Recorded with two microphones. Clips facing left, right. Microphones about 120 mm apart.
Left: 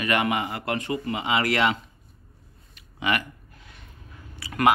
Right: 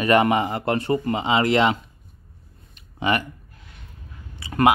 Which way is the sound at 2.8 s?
35° right (ahead or behind).